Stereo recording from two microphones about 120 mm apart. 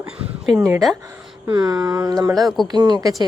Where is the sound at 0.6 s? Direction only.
25° right (ahead or behind).